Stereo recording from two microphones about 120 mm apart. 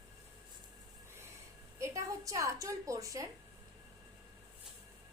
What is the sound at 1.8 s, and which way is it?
A woman's voice, 25° right (ahead or behind).